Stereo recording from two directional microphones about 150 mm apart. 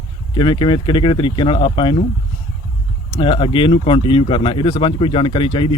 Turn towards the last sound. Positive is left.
turn(degrees=35)  # may be behind; listen again after turning